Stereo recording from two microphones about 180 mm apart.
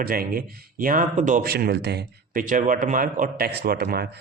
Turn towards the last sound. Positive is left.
turn(degrees=-60)  # may be behind; listen again after turning